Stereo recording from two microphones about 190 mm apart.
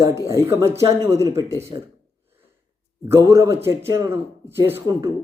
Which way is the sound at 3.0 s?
15° right (ahead or behind).